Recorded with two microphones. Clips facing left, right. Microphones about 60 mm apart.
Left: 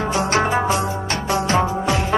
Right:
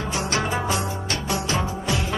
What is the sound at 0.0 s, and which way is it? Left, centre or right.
Music, left.